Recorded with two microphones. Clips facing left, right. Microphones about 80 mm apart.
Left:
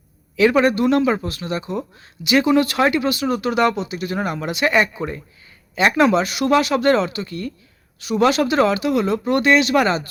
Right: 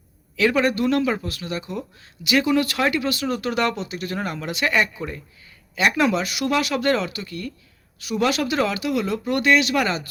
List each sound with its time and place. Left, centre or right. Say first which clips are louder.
0.3 s speech: left 4 dB; left
3.2 s speech: left 4 dB; centre; by 10.1 s left